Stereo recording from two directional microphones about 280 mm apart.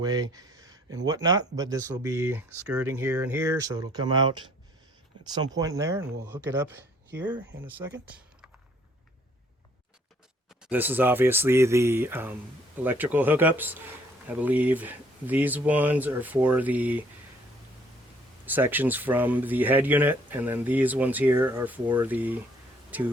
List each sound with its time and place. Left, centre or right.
0.0 s speech: centre
6.0 s speech: right
6.2 s speech: centre
10.6 s speech: centre
18.4 s speech: centre